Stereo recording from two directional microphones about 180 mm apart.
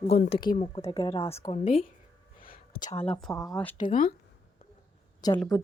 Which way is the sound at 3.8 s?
50° left (ahead or behind).